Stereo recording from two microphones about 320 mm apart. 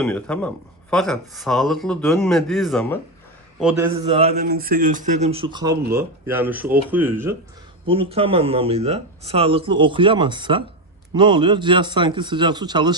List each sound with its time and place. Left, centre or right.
0.0 s speech: centre
4.4 s speech: right; by 7.3 s centre
7.9 s speech: centre